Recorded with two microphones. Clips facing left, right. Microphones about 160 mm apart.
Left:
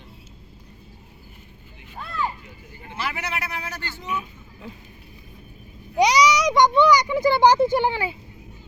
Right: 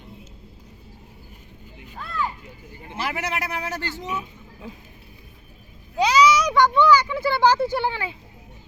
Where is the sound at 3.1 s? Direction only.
55° right (ahead or behind).